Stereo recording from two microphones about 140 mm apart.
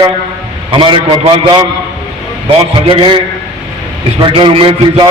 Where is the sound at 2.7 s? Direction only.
35° right (ahead or behind).